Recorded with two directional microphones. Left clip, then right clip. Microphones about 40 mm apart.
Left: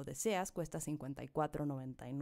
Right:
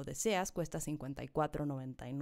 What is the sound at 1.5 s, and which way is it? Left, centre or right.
Speech, left.